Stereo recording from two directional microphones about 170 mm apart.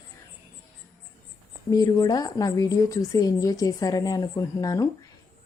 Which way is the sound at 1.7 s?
20° left (ahead or behind).